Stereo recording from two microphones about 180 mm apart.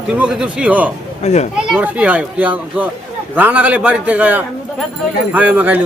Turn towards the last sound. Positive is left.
turn(degrees=-10)  # may be behind; listen again after turning